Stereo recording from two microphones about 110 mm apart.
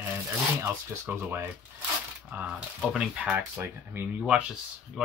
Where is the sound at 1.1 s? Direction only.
20° right (ahead or behind).